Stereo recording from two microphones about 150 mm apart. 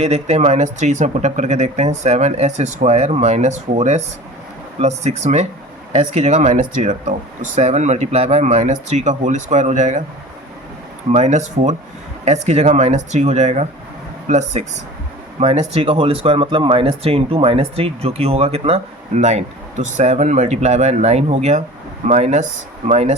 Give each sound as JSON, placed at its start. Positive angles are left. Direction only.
{"t": 0.0, "sound": "speech", "side_deg": -45}
{"t": 11.1, "sound": "speech", "side_deg": -50}